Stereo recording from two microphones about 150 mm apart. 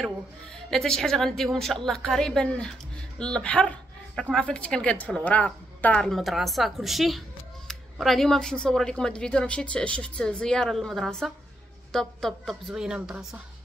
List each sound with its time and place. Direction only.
0.7 s speech: 5° left (ahead or behind)